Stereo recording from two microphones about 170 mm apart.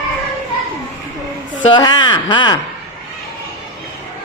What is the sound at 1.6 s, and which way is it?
A woman's voice, 30° left (ahead or behind).